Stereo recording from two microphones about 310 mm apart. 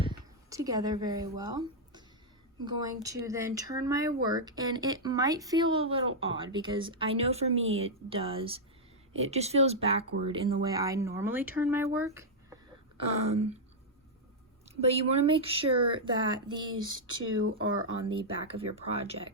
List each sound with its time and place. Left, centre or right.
0.0 s a sound: centre
2.6 s speech: centre
14.8 s speech: centre
17.4 s speech: right
18.1 s speech: centre